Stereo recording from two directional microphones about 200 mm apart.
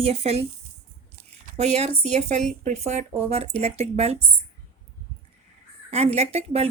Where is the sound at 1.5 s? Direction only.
30° right (ahead or behind).